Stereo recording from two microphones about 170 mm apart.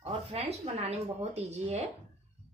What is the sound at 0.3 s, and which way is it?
A woman's voice, 35° right (ahead or behind).